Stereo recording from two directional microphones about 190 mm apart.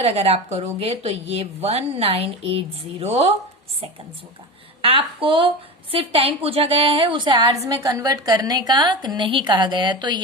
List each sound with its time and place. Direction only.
0.0 s speech: 30° right (ahead or behind)
4.8 s a woman's voice: 30° right (ahead or behind)